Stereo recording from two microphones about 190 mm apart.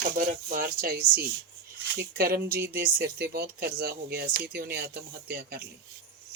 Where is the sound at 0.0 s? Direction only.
45° right (ahead or behind).